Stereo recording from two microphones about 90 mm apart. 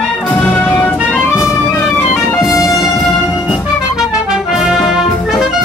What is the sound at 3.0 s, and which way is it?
Music, 5° right (ahead or behind).